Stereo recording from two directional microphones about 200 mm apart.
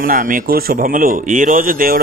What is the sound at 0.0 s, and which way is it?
Speech, 45° right (ahead or behind).